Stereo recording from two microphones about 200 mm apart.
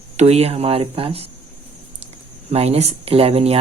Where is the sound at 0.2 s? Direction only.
30° right (ahead or behind).